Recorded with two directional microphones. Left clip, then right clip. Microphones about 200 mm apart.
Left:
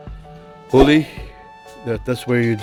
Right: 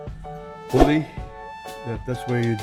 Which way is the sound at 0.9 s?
55° left (ahead or behind).